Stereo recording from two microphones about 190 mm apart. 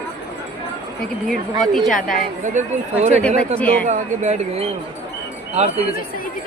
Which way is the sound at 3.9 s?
40° right (ahead or behind).